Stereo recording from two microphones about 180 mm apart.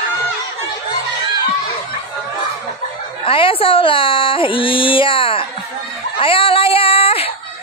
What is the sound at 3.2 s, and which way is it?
Speech, 30° left (ahead or behind).